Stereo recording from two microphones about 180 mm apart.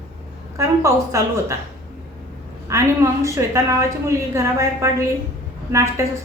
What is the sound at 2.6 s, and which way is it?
A woman's voice, 15° right (ahead or behind).